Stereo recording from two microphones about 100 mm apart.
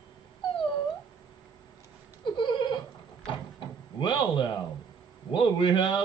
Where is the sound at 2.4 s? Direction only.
50° left (ahead or behind).